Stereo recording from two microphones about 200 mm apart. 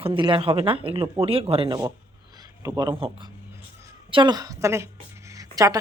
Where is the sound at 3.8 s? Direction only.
20° right (ahead or behind).